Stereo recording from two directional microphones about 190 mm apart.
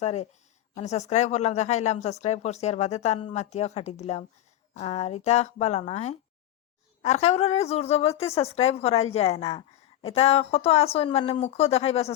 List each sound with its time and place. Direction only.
0.0 s speech: 35° left (ahead or behind)